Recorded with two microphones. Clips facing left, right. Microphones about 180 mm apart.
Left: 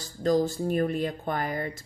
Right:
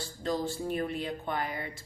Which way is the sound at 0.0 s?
40° left (ahead or behind).